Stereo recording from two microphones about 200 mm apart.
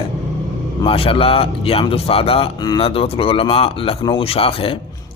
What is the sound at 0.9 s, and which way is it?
A man's voice, 30° left (ahead or behind).